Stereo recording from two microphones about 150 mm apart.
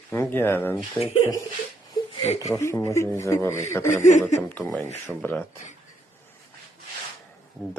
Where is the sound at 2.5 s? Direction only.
20° left (ahead or behind).